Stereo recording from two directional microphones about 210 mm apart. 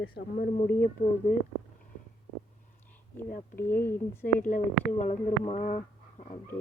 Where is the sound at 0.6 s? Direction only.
45° left (ahead or behind).